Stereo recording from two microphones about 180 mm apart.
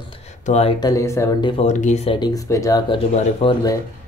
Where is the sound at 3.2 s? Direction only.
35° left (ahead or behind).